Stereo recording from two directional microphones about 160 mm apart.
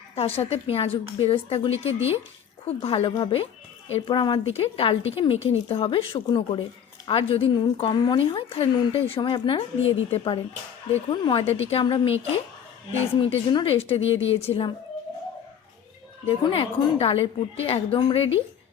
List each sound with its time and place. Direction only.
0.2 s a woman's voice: 40° left (ahead or behind)
16.2 s a woman's voice: 35° left (ahead or behind)